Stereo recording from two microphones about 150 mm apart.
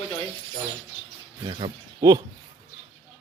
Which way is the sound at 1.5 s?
35° right (ahead or behind).